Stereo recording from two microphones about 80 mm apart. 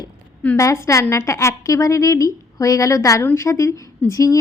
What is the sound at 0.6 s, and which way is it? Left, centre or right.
A woman's voice, left.